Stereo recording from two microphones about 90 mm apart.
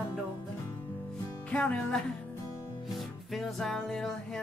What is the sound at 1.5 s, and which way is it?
Music, 10° left (ahead or behind).